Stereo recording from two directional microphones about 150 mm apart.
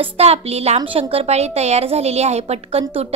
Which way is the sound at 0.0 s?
45° right (ahead or behind).